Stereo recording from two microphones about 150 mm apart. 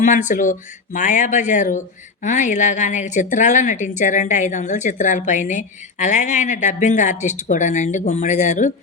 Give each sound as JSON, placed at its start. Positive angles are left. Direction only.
{"t": 0.0, "sound": "a woman's voice", "side_deg": 55}